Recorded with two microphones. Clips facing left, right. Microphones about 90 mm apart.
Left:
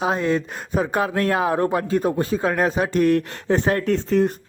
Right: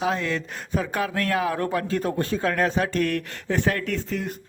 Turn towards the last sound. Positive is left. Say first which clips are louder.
# left 9 dB
turn(degrees=40)  # may be behind; listen again after turning